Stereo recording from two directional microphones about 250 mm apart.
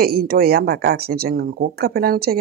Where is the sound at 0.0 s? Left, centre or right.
Right.